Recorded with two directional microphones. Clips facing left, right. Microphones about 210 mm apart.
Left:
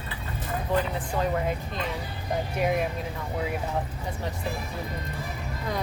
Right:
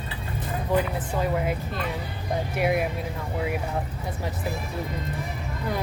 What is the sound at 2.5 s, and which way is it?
Speech, 5° right (ahead or behind).